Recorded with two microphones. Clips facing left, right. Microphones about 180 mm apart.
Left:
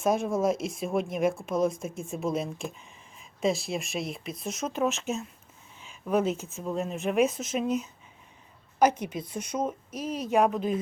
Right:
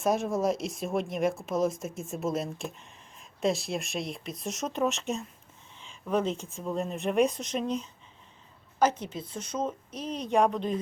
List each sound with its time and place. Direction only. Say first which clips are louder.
0.0 s a woman's voice: left 1 dB; centre (ahead or behind)